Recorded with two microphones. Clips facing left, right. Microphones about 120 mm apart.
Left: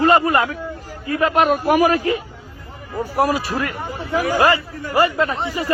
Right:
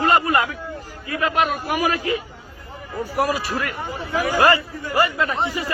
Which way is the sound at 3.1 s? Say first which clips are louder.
Left 3 dB; 30° left (ahead or behind).